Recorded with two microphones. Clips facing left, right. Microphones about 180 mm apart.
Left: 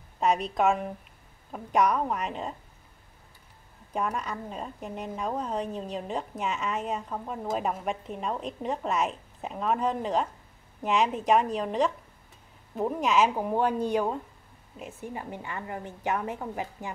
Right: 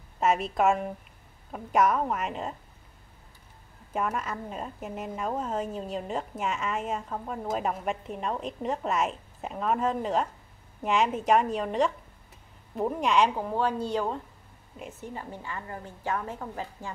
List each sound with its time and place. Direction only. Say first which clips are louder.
0.2 s a woman's voice: even; centre (ahead or behind)
3.9 s a woman's voice: even; centre (ahead or behind); by 16.9 s 15° left (ahead or behind)